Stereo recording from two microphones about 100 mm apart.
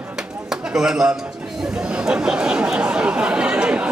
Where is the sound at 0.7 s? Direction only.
5° right (ahead or behind).